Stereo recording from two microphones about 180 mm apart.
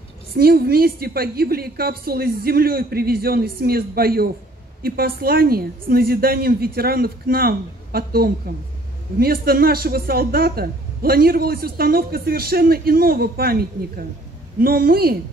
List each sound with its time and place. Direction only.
0.3 s speech: 55° right (ahead or behind)